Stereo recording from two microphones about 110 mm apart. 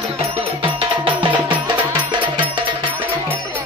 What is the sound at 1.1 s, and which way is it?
Music, 45° right (ahead or behind).